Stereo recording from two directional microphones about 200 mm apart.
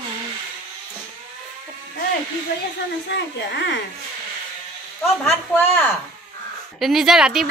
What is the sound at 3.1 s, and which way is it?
Speech, 60° left (ahead or behind).